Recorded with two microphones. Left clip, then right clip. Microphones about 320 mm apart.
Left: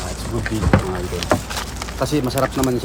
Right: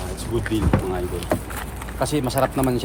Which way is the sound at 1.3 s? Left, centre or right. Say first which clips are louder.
Left 6 dB; left.